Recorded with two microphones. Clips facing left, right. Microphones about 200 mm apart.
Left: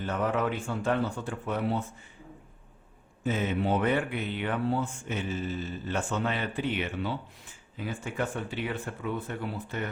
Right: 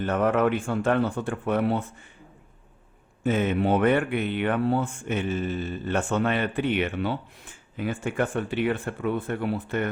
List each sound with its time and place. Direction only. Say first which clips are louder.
0.0 s speech: right 6 dB; 60° right (ahead or behind)
3.2 s speech: right 5 dB; 60° right (ahead or behind)